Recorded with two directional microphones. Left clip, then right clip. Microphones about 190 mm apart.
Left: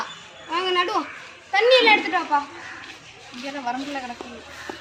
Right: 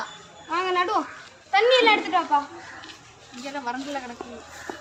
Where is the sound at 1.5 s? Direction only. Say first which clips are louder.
Left 2 dB; centre (ahead or behind).